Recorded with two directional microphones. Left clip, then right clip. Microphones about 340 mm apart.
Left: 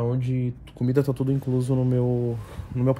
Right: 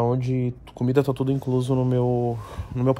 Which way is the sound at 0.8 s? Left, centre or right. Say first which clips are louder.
Right 2 dB; centre.